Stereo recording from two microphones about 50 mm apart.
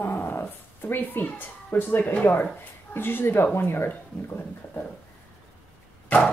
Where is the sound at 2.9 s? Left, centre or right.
Left.